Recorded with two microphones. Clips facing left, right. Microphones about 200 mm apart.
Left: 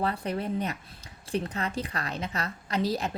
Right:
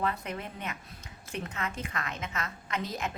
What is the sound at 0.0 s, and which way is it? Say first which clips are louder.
A woman's voice: left 4 dB; 35° left (ahead or behind).